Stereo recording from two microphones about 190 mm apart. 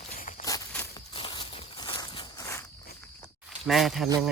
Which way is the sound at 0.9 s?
25° left (ahead or behind).